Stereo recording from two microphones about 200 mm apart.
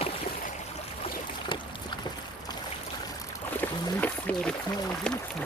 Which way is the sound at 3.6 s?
10° left (ahead or behind).